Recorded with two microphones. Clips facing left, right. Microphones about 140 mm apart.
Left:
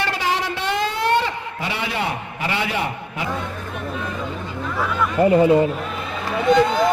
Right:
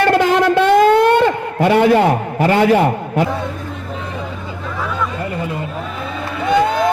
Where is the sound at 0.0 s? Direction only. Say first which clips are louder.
Right 10 dB; 55° right (ahead or behind).